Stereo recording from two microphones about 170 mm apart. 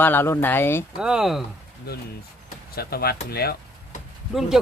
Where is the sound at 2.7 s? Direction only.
65° left (ahead or behind).